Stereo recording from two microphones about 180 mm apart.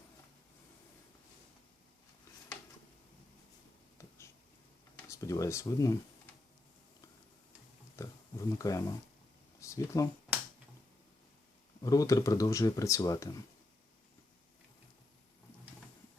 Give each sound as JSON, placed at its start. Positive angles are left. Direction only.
{"t": 5.0, "sound": "speech", "side_deg": 15}
{"t": 7.9, "sound": "pig", "side_deg": 15}
{"t": 9.6, "sound": "speech", "side_deg": 15}
{"t": 11.8, "sound": "speech", "side_deg": 20}